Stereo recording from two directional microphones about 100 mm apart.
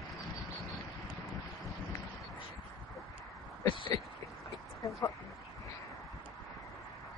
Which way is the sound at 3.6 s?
50° left (ahead or behind).